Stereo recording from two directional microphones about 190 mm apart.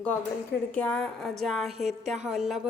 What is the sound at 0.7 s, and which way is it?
A woman's voice, 5° left (ahead or behind).